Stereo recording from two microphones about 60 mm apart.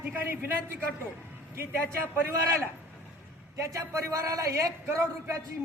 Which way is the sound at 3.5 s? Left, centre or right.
Right.